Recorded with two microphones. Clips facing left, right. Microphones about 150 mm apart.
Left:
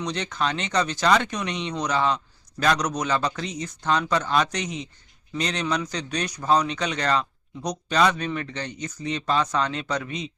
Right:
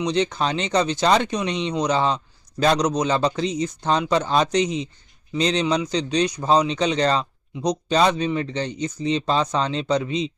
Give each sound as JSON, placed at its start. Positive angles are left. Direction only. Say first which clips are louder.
{"t": 0.0, "sound": "speech", "louder": "right 5 dB", "side_deg": -25}